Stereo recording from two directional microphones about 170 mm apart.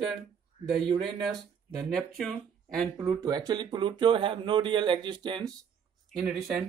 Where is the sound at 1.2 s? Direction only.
Centre (ahead or behind).